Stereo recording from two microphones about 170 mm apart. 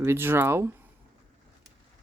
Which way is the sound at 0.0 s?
15° right (ahead or behind).